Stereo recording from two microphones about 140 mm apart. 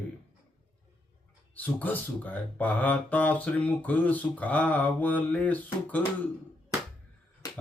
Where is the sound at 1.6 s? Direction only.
10° left (ahead or behind).